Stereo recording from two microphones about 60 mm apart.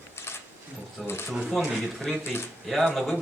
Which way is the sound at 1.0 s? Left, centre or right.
Centre.